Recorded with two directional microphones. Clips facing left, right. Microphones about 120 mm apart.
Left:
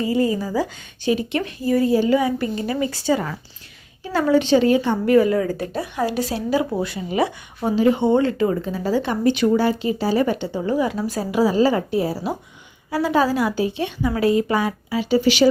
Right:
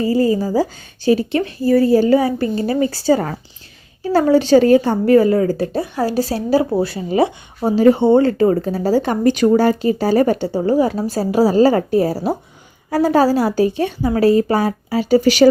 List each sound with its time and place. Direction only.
0.0 s speech: 35° right (ahead or behind)
7.8 s speech: 40° right (ahead or behind)